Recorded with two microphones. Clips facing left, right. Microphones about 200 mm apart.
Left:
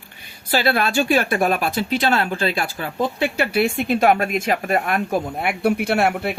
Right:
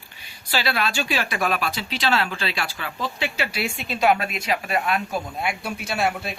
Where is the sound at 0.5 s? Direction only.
50° left (ahead or behind).